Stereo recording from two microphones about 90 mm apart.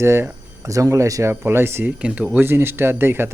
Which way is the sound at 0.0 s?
30° right (ahead or behind).